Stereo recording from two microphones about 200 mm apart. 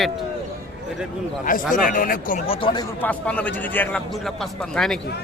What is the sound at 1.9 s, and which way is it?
Speech, 45° left (ahead or behind).